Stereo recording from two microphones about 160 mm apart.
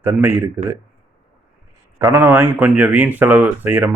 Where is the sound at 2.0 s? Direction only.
15° right (ahead or behind).